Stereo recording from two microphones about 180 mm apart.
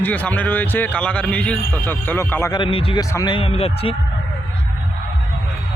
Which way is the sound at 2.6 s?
30° left (ahead or behind).